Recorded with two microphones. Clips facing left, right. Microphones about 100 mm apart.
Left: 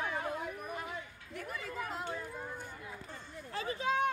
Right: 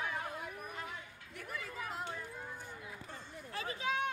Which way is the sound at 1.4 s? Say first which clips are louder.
Left 3 dB; centre (ahead or behind).